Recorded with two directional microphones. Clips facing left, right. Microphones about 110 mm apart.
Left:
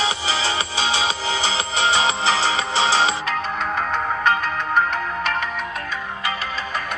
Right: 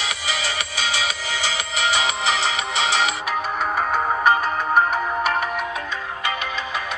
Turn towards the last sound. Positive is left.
turn(degrees=-10)  # may be behind; listen again after turning